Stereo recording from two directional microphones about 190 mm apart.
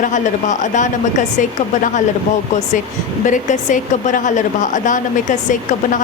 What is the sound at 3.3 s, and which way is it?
A woman's voice, 40° left (ahead or behind).